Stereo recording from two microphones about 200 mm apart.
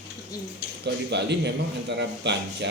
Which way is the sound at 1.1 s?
60° right (ahead or behind).